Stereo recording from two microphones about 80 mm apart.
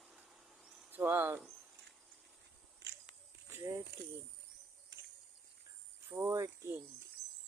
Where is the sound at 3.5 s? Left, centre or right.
Right.